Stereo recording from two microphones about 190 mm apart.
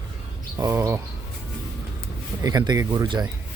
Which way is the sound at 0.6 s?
15° right (ahead or behind).